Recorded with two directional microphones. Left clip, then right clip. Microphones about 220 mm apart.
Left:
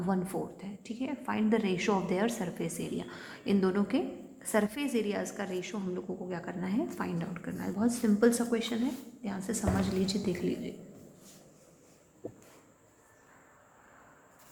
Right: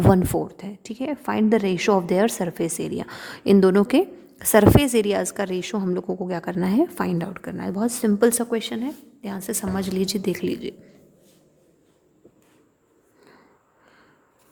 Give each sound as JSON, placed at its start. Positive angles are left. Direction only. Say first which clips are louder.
{"t": 0.1, "sound": "a woman's voice", "louder": "right 14 dB", "side_deg": -55}